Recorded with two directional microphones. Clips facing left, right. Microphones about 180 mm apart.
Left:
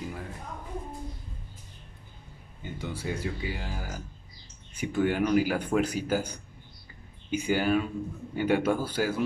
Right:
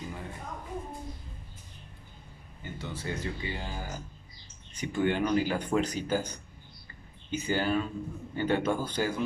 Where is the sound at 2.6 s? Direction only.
10° left (ahead or behind).